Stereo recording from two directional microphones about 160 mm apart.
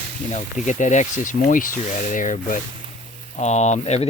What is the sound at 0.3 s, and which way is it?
Speech, 45° left (ahead or behind).